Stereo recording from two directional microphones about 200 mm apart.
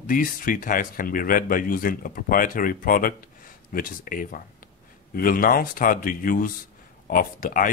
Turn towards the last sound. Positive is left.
turn(degrees=45)  # may be behind; listen again after turning